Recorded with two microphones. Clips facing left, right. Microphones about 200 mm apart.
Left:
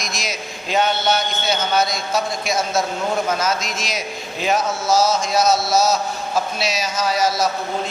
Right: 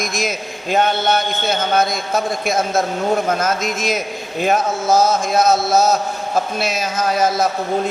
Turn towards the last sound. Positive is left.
turn(degrees=-55)  # may be behind; listen again after turning